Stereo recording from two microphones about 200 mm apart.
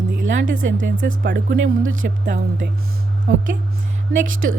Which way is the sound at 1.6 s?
85° right.